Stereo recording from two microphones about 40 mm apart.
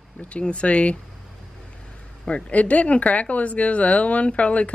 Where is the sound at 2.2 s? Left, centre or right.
Left.